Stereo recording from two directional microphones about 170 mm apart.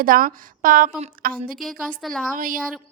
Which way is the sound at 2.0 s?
Centre (ahead or behind).